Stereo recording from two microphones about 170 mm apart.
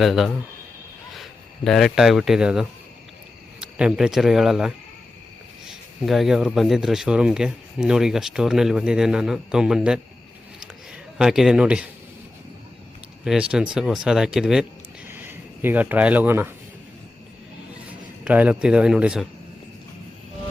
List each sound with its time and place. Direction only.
0.0 s speech: centre (ahead or behind)
10.6 s a sound: 5° right (ahead or behind)
13.2 s speech: 5° right (ahead or behind)
18.3 s speech: 10° right (ahead or behind)